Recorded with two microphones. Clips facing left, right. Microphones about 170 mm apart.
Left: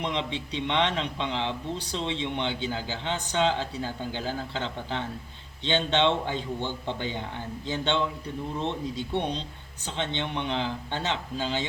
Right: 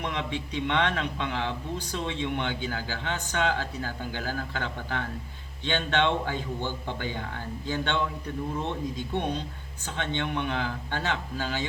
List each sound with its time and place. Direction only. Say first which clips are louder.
0.0 s speech: left 1 dB; 20° left (ahead or behind)
10.0 s speech: right 1 dB; 20° left (ahead or behind)